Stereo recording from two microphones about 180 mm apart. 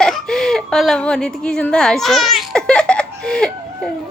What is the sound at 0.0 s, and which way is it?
Speech, centre (ahead or behind).